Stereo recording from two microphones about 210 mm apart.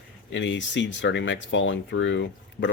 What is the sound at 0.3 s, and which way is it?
Speech, 60° left (ahead or behind).